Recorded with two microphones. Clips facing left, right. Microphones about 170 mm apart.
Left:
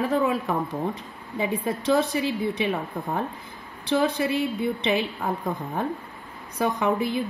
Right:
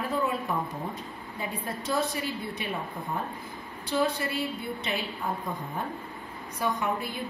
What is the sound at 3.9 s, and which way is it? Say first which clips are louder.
A woman's voice: left 5 dB; 90° left.